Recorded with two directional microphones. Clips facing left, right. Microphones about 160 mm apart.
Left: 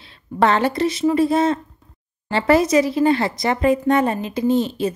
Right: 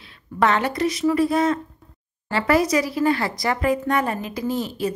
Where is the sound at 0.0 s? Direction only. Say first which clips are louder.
Left 3 dB; 30° left (ahead or behind).